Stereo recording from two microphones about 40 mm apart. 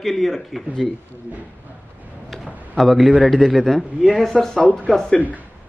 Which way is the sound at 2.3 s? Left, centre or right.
Centre.